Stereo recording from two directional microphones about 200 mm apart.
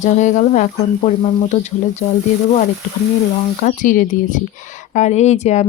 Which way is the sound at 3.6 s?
40° left (ahead or behind).